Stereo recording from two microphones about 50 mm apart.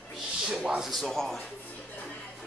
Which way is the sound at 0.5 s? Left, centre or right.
Centre.